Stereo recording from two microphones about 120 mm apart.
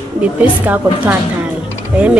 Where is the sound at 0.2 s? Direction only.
15° right (ahead or behind).